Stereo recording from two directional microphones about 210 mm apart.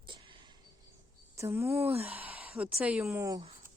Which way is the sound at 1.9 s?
30° right (ahead or behind).